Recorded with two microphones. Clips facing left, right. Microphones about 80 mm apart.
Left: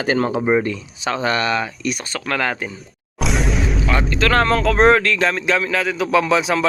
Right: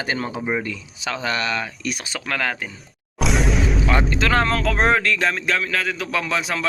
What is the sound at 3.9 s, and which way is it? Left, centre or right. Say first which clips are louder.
Speech: left 3 dB; centre.